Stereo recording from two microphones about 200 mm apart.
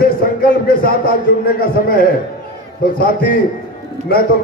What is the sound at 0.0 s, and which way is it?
A man's voice, 45° left (ahead or behind).